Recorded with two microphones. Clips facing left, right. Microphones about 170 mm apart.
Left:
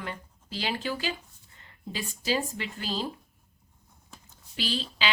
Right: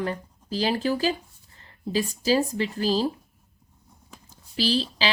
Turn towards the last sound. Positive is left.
turn(degrees=-35)  # may be behind; listen again after turning